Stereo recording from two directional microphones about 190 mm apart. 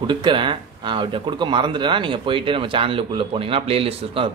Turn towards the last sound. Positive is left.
turn(degrees=-30)  # may be behind; listen again after turning